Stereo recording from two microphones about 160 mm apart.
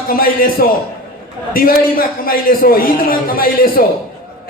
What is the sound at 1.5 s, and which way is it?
A man's voice, 65° left (ahead or behind).